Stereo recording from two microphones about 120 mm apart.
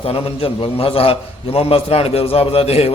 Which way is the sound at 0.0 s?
50° left (ahead or behind).